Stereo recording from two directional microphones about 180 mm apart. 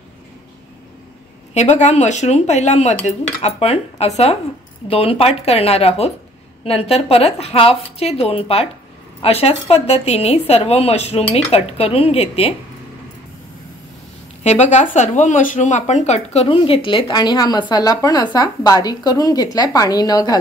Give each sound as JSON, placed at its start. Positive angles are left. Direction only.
{"t": 1.5, "sound": "a woman's voice", "side_deg": 40}
{"t": 14.4, "sound": "speech", "side_deg": 40}